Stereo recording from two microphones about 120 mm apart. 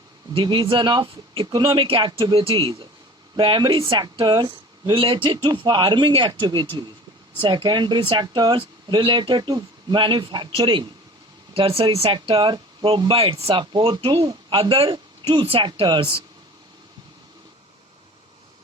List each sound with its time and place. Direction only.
0.3 s speech: 40° right (ahead or behind)
14.2 s speech: 35° right (ahead or behind)
14.6 s speech: 50° right (ahead or behind)